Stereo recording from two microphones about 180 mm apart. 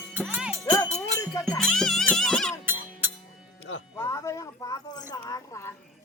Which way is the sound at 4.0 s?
15° left (ahead or behind).